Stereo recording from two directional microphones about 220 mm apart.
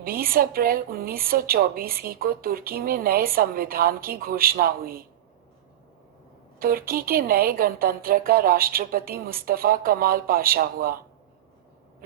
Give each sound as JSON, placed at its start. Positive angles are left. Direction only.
{"t": 0.0, "sound": "a woman's voice", "side_deg": -40}
{"t": 6.6, "sound": "a woman's voice", "side_deg": -40}